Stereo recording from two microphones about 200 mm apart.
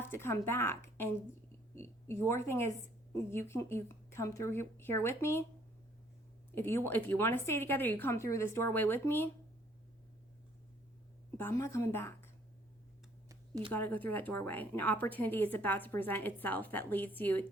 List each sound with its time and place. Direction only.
0.0 s a woman's voice: 10° left (ahead or behind)
6.5 s a woman's voice: 10° left (ahead or behind)
11.3 s a woman's voice: 10° left (ahead or behind)
13.7 s a woman's voice: 10° left (ahead or behind)